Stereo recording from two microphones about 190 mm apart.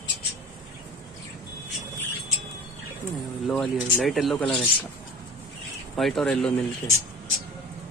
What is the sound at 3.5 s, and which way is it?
Speech, centre (ahead or behind).